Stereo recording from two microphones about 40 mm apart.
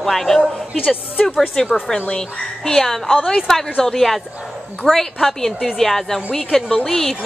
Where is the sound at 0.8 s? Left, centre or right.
Left.